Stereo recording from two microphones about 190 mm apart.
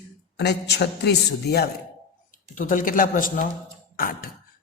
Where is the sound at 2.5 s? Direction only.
45° left (ahead or behind).